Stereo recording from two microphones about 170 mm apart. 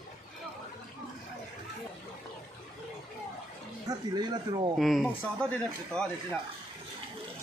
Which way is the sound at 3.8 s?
25° right (ahead or behind).